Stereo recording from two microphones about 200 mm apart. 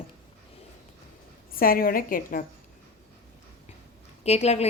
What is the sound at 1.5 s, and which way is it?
Speech, 45° left (ahead or behind).